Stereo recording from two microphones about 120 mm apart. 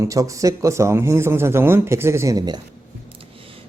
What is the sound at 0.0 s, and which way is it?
Speech, 25° right (ahead or behind).